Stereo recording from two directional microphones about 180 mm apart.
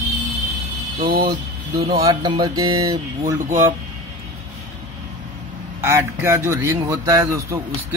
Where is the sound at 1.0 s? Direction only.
55° right (ahead or behind).